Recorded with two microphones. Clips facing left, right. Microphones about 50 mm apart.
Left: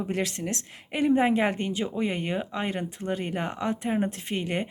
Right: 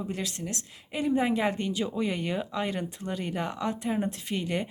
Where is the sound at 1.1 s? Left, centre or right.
Left.